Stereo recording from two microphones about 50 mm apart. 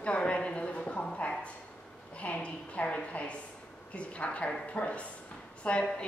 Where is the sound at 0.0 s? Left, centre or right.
Left.